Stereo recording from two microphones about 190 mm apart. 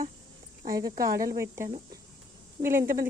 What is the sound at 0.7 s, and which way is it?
Speech, 20° right (ahead or behind).